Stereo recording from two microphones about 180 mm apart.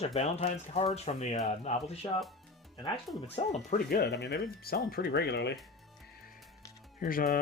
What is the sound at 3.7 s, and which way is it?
Speech, 50° left (ahead or behind).